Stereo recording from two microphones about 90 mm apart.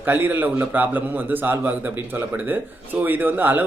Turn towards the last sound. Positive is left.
turn(degrees=-20)  # may be behind; listen again after turning